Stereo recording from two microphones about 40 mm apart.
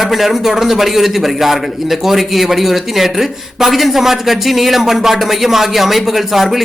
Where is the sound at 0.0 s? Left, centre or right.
Centre.